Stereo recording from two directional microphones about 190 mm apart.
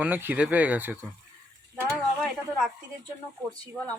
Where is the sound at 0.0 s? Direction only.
10° right (ahead or behind).